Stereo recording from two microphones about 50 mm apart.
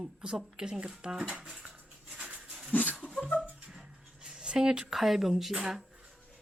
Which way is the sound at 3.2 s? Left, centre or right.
Left.